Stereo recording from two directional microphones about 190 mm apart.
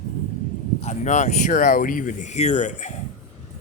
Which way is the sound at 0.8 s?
40° left (ahead or behind).